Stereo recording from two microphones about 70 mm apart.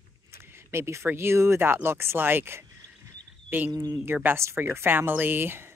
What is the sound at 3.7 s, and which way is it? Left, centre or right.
Speech, right.